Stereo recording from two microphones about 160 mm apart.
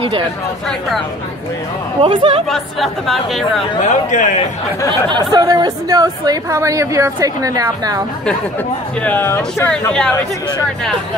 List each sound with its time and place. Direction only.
0.7 s speech: centre (ahead or behind)
2.0 s speech: 35° right (ahead or behind)
2.5 s speech: centre (ahead or behind)
3.8 s speech: 50° left (ahead or behind)
5.1 s a woman's voice: 25° right (ahead or behind)
9.0 s speech: 10° left (ahead or behind)